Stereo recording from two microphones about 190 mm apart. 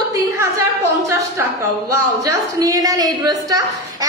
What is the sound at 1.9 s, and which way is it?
A woman's voice, 15° right (ahead or behind).